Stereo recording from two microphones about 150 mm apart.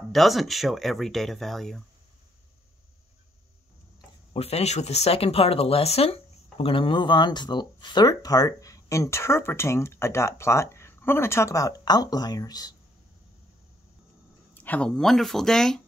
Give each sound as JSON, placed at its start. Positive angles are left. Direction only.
{"t": 0.1, "sound": "speech", "side_deg": 0}
{"t": 4.3, "sound": "speech", "side_deg": 45}
{"t": 14.5, "sound": "speech", "side_deg": 10}